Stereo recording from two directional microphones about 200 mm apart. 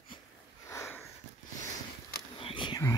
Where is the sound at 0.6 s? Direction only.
15° left (ahead or behind).